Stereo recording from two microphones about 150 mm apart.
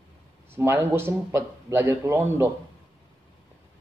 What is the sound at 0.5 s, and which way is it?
A man's voice, 15° right (ahead or behind).